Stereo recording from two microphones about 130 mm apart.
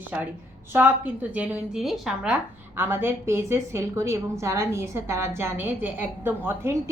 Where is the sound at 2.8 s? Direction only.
20° right (ahead or behind).